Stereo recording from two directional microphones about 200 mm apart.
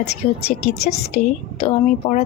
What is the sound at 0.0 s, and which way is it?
A woman's voice, 35° left (ahead or behind).